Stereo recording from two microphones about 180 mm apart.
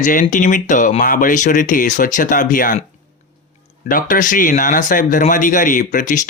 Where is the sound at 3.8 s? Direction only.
50° left (ahead or behind).